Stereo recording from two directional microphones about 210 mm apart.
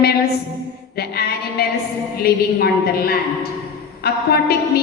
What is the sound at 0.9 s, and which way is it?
A woman's voice, 50° left (ahead or behind).